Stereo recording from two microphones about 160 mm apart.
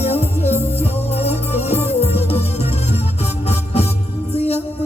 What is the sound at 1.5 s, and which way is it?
Music, 15° right (ahead or behind).